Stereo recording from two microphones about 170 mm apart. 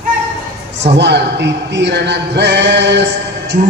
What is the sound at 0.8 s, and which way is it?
Speech, 90° right.